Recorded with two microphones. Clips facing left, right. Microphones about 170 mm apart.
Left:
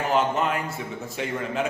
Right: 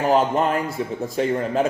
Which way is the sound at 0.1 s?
35° right (ahead or behind).